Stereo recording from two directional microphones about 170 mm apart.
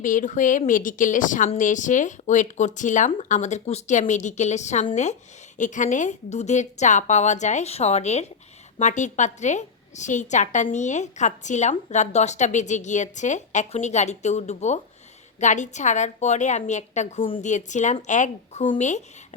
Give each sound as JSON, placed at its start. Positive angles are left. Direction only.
{"t": 0.0, "sound": "a woman's voice", "side_deg": 50}
{"t": 17.4, "sound": "a woman's voice", "side_deg": 45}